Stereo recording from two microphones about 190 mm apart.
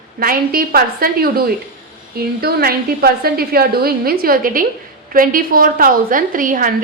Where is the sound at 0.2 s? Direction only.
50° right (ahead or behind).